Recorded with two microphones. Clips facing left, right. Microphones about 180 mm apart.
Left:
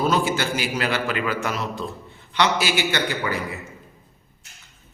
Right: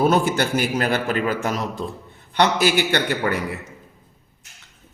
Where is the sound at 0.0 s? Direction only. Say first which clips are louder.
Right 3 dB; 50° right (ahead or behind).